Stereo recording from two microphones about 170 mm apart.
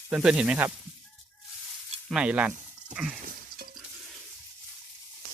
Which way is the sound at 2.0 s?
5° right (ahead or behind).